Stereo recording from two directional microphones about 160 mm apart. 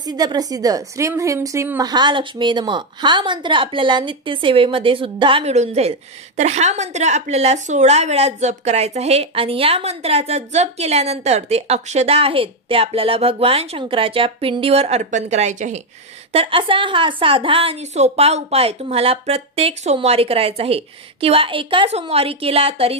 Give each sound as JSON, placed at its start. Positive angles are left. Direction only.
{"t": 0.0, "sound": "a woman's voice", "side_deg": -25}